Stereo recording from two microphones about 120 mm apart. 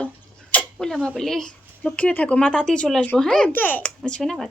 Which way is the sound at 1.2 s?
5° left (ahead or behind).